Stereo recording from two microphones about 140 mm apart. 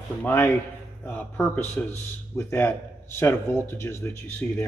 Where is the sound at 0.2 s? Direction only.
15° left (ahead or behind).